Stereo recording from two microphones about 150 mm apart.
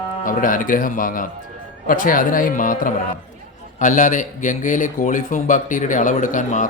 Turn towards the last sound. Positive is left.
turn(degrees=60)  # may be behind; listen again after turning